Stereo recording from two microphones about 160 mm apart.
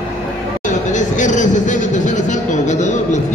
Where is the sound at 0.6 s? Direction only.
50° left (ahead or behind).